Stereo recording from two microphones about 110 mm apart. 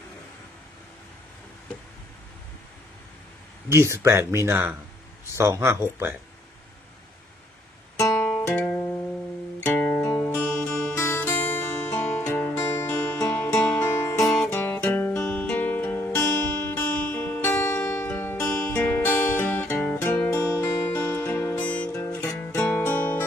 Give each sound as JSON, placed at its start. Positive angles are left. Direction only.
{"t": 3.7, "sound": "speech", "side_deg": -25}
{"t": 7.9, "sound": "music", "side_deg": 25}
{"t": 10.0, "sound": "music", "side_deg": 25}
{"t": 10.2, "sound": "music", "side_deg": 10}
{"t": 10.9, "sound": "music", "side_deg": 25}
{"t": 13.8, "sound": "music", "side_deg": 25}
{"t": 14.2, "sound": "music", "side_deg": 5}
{"t": 21.9, "sound": "music", "side_deg": 25}
{"t": 22.4, "sound": "music", "side_deg": 15}